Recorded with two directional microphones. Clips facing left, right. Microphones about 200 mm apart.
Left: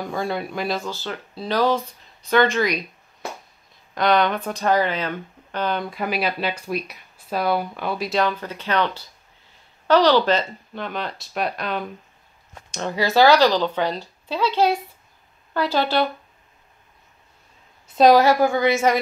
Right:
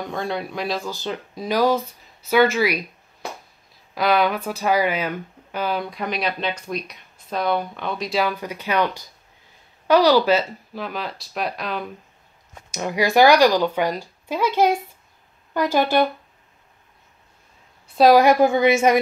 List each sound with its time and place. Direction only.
0.0 s speech: centre (ahead or behind)
0.8 s speech: 15° right (ahead or behind)
3.9 s speech: 5° right (ahead or behind)
12.7 s speech: 10° right (ahead or behind)
17.9 s speech: 5° right (ahead or behind)
18.2 s a woman's voice: 20° right (ahead or behind)